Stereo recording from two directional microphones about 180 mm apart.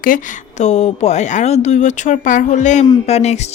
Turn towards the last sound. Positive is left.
turn(degrees=35)  # may be behind; listen again after turning